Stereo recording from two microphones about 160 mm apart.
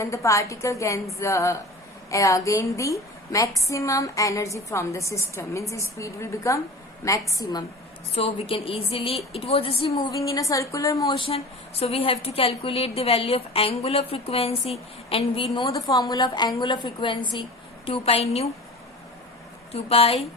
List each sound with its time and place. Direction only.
0.0 s a woman's voice: 20° left (ahead or behind)
8.1 s a woman's voice: 35° left (ahead or behind)
10.1 s a woman's voice: 20° left (ahead or behind)
11.2 s a woman's voice: 40° left (ahead or behind)
15.6 s a woman's voice: 20° left (ahead or behind); by 18.4 s 40° left (ahead or behind)
19.7 s a woman's voice: 35° left (ahead or behind)